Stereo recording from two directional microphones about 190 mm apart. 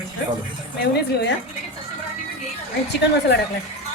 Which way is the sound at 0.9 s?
60° left (ahead or behind).